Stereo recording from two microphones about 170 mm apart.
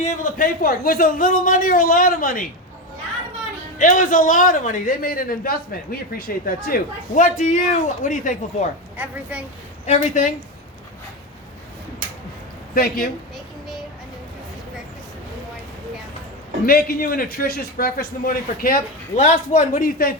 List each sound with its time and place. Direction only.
0.0 s a man's voice: 55° left (ahead or behind)
3.8 s a man's voice: 50° left (ahead or behind)
9.0 s a woman's voice: 10° right (ahead or behind)
9.8 s a man's voice: 45° left (ahead or behind)
12.7 s a man's voice: 55° left (ahead or behind)
13.3 s child singing: centre (ahead or behind)
16.6 s a man's voice: 60° left (ahead or behind)